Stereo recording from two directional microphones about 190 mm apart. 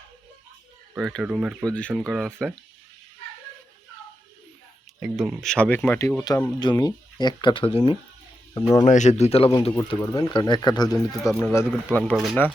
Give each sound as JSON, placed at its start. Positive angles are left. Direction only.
{"t": 0.9, "sound": "speech", "side_deg": 0}
{"t": 4.9, "sound": "speech", "side_deg": -5}
{"t": 8.5, "sound": "speech", "side_deg": 15}
{"t": 8.8, "sound": "speech", "side_deg": 40}
{"t": 9.7, "sound": "speech", "side_deg": 20}